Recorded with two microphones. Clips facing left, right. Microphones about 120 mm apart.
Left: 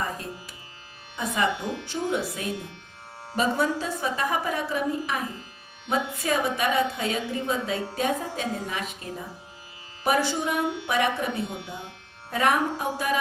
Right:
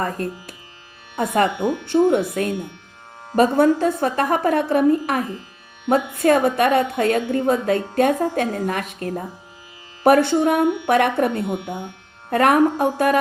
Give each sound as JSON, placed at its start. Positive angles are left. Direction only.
{"t": 0.0, "sound": "a woman's voice", "side_deg": -55}
{"t": 3.3, "sound": "a woman's voice", "side_deg": -55}
{"t": 11.4, "sound": "speech", "side_deg": -20}
{"t": 12.3, "sound": "a woman's voice", "side_deg": -55}